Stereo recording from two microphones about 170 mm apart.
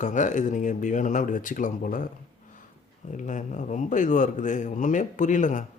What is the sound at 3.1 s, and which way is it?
Speech, 45° left (ahead or behind).